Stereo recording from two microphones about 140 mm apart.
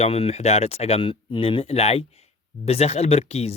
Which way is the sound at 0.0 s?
45° left (ahead or behind).